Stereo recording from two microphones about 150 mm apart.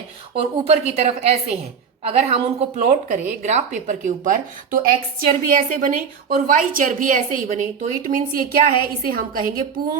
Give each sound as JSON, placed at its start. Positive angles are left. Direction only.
{"t": 0.3, "sound": "a woman's voice", "side_deg": -45}